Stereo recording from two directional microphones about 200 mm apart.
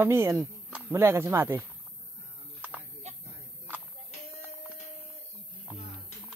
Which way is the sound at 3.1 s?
35° right (ahead or behind).